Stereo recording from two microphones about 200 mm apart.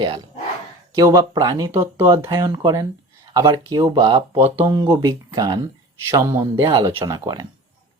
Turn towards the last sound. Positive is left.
turn(degrees=-20)  # may be behind; listen again after turning